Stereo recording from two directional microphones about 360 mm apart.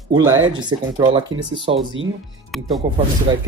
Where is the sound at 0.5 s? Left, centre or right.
Centre.